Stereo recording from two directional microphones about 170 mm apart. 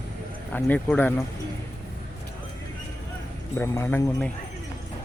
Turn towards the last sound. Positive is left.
turn(degrees=10)  # may be behind; listen again after turning